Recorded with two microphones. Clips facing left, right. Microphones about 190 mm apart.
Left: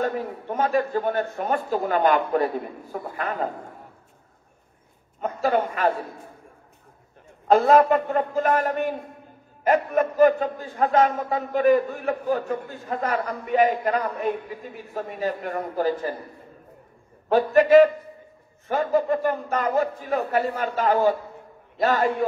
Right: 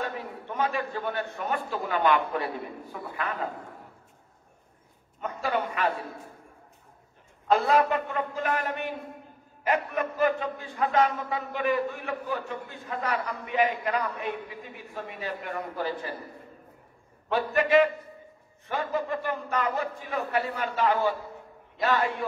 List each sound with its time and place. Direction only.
0.0 s a man's voice: 45° left (ahead or behind)
5.2 s a man's voice: 45° left (ahead or behind)
7.4 s a man's voice: 45° left (ahead or behind)
17.3 s a man's voice: 40° left (ahead or behind)